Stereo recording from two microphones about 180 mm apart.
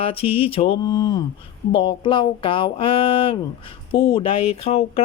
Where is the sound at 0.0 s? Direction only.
30° left (ahead or behind).